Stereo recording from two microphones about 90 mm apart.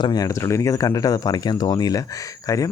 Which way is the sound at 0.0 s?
45° left (ahead or behind).